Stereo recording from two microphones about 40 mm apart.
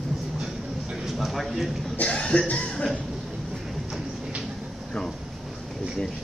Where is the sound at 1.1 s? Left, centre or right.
Centre.